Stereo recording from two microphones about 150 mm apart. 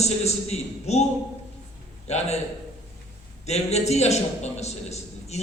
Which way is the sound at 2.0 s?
45° left (ahead or behind).